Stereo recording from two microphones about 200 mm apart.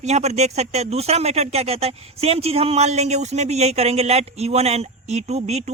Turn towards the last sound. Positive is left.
turn(degrees=-35)  # may be behind; listen again after turning